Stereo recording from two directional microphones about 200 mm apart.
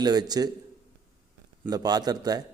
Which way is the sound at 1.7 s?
20° right (ahead or behind).